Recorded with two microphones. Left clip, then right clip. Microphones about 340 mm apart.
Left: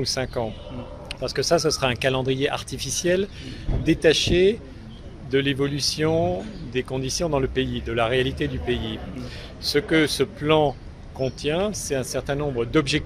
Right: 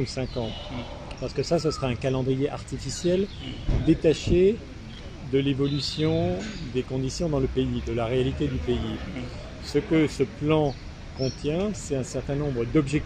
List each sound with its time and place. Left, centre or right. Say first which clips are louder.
0.0 s speech: left 5 dB; left